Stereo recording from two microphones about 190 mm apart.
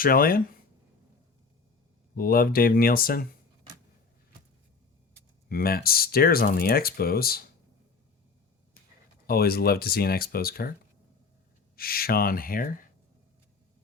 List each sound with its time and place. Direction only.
0.0 s speech: 50° left (ahead or behind)
2.1 s speech: 50° left (ahead or behind)
5.5 s speech: 50° left (ahead or behind)
9.2 s speech: 55° left (ahead or behind)
11.8 s speech: 50° left (ahead or behind)